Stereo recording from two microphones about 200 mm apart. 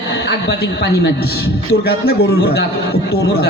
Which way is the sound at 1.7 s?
55° left (ahead or behind).